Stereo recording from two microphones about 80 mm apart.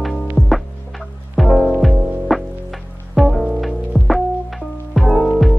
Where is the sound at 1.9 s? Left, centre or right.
Right.